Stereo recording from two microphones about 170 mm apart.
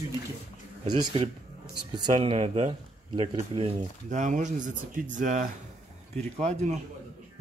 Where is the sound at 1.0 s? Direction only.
35° right (ahead or behind).